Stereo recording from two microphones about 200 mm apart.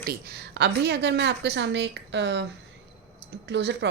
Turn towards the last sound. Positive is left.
turn(degrees=-60)  # may be behind; listen again after turning